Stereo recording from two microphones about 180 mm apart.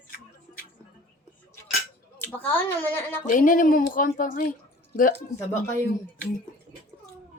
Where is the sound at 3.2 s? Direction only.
50° left (ahead or behind).